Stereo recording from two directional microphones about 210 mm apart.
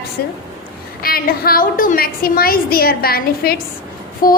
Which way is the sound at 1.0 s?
45° left (ahead or behind).